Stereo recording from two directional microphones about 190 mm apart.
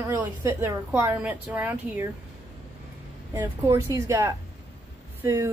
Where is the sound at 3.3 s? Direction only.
10° right (ahead or behind).